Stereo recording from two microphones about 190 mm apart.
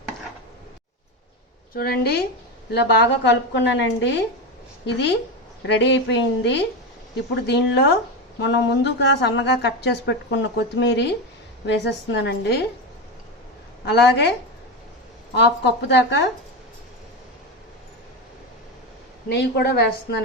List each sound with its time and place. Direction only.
1.7 s speech: 55° left (ahead or behind)
2.7 s a woman's voice: 65° left (ahead or behind)
13.8 s a woman's voice: 60° left (ahead or behind)
15.4 s a woman's voice: 65° left (ahead or behind)
19.3 s a woman's voice: 60° left (ahead or behind)